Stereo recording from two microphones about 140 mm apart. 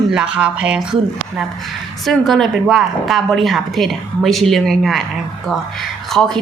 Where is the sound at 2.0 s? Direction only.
Centre (ahead or behind).